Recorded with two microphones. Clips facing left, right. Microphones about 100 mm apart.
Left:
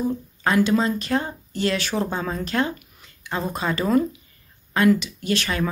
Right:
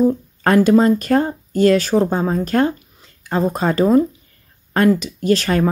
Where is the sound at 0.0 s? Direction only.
45° right (ahead or behind).